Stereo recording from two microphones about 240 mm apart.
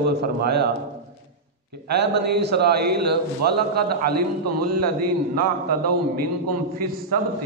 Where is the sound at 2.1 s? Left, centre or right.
Right.